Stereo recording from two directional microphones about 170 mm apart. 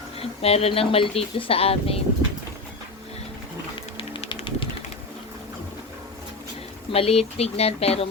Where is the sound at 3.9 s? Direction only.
30° left (ahead or behind).